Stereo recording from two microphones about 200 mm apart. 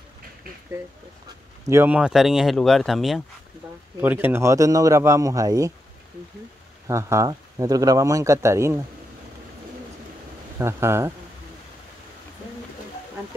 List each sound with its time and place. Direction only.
1.7 s speech: 10° right (ahead or behind)
6.9 s speech: 15° right (ahead or behind)
10.6 s speech: 15° right (ahead or behind)